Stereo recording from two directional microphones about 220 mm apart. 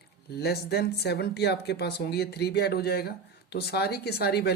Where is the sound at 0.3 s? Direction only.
45° left (ahead or behind).